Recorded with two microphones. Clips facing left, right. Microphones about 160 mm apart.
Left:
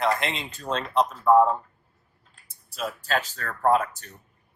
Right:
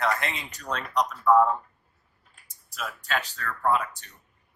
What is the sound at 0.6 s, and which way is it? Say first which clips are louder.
Speech: left 3 dB; 25° left (ahead or behind).